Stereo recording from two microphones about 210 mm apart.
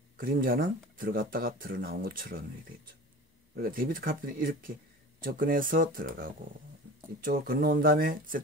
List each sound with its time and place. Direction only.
0.2 s speech: 40° right (ahead or behind)
3.5 s speech: 45° right (ahead or behind)